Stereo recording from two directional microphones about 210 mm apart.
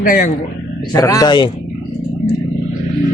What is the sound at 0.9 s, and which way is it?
Speech, 15° left (ahead or behind).